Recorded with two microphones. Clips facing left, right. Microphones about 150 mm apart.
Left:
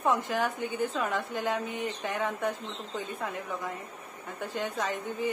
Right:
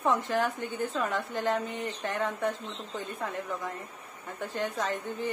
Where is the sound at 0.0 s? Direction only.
5° left (ahead or behind).